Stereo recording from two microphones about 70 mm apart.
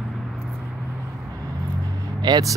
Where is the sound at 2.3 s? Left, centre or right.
Right.